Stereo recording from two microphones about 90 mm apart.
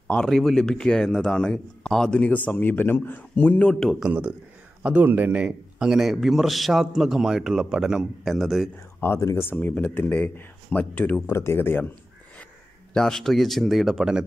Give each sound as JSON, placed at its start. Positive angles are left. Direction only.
{"t": 0.1, "sound": "a man's voice", "side_deg": 5}
{"t": 4.0, "sound": "a man's voice", "side_deg": -15}
{"t": 9.0, "sound": "speech", "side_deg": 30}
{"t": 11.2, "sound": "speech", "side_deg": 30}
{"t": 12.9, "sound": "a man's voice", "side_deg": 5}